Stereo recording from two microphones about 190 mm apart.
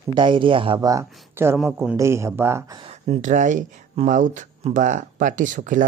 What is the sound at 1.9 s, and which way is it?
Speech, 15° right (ahead or behind).